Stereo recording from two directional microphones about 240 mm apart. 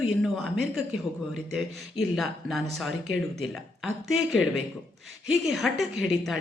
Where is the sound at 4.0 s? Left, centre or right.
Centre.